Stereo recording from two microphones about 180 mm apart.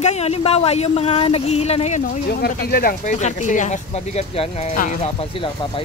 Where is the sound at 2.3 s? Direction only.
60° left (ahead or behind); by 4.7 s 35° left (ahead or behind).